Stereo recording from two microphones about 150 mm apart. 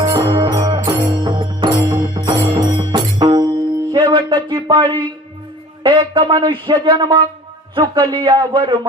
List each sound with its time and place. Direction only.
0.0 s music: 30° right (ahead or behind)
1.1 s music: 30° right (ahead or behind)
1.8 s music: 20° right (ahead or behind)
3.9 s a sound: 30° right (ahead or behind)
5.8 s a man's voice: 30° right (ahead or behind)